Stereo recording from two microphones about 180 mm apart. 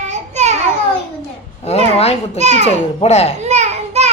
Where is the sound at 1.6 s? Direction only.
35° left (ahead or behind).